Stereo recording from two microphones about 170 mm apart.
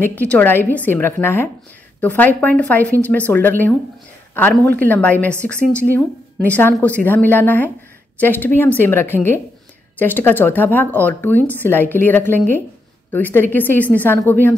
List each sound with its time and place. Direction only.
0.0 s speech: 10° left (ahead or behind)